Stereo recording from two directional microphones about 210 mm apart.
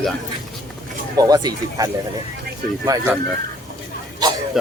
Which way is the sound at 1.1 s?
15° right (ahead or behind).